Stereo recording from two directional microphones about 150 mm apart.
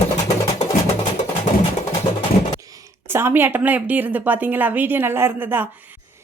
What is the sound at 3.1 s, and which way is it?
A woman's voice, 15° right (ahead or behind).